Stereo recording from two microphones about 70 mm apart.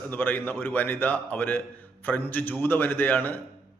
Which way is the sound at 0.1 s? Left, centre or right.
Left.